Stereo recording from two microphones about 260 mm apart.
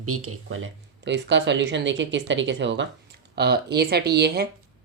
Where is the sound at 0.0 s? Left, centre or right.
Right.